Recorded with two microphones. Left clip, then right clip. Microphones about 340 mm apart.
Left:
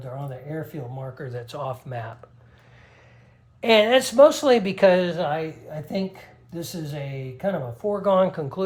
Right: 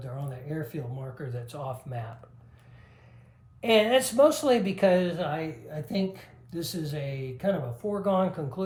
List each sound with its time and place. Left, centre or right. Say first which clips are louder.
0.0 s a sound: left 5 dB; centre
1.2 s speech: left 6 dB; left
3.6 s speech: left 5 dB; left
5.6 s speech: left 3 dB; centre
8.0 s speech: left 7 dB; left